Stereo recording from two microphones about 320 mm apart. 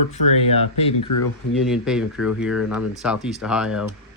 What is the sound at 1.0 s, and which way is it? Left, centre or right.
Speech, left.